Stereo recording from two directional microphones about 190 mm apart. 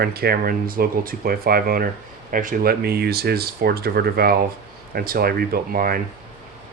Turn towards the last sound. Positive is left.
turn(degrees=-50)  # may be behind; listen again after turning